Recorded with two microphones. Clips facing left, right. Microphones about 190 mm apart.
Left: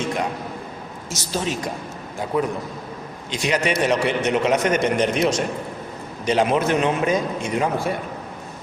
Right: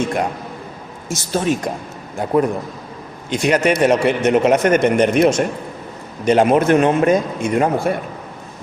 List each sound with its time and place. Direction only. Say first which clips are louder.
1.1 s a man's voice: right 7 dB; 50° right (ahead or behind)